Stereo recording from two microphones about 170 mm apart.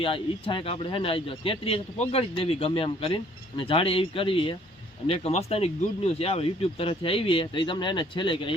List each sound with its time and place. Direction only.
0.0 s speech: 30° left (ahead or behind)